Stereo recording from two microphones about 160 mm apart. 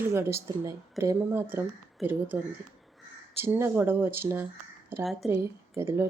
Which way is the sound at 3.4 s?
15° right (ahead or behind).